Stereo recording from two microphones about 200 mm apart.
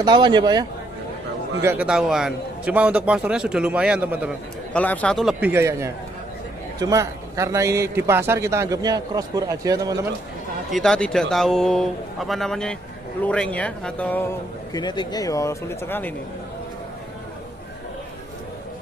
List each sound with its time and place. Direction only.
0.0 s speech: 20° right (ahead or behind)
1.6 s a man's voice: 10° right (ahead or behind)
4.7 s a man's voice: 5° left (ahead or behind); by 9.9 s 20° right (ahead or behind)
10.7 s a man's voice: centre (ahead or behind)
14.7 s speech: 20° left (ahead or behind)